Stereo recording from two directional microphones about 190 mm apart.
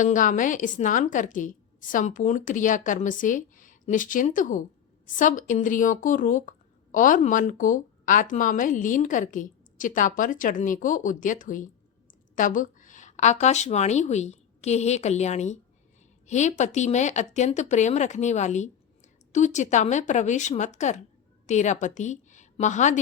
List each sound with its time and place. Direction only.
0.0 s a woman's voice: 45° left (ahead or behind)